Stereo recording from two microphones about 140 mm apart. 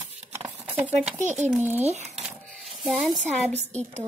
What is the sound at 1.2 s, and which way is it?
Speech, 55° right (ahead or behind).